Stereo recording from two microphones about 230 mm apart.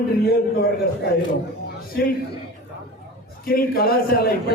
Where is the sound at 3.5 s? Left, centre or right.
Left.